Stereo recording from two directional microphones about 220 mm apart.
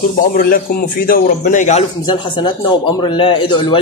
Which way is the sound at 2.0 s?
20° left (ahead or behind).